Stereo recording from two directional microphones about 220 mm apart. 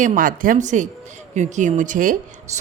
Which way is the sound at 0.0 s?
35° right (ahead or behind).